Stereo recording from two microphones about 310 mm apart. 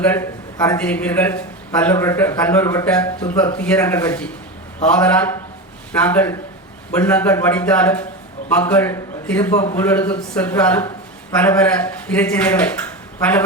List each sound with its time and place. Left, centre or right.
0.0 s a man's voice: centre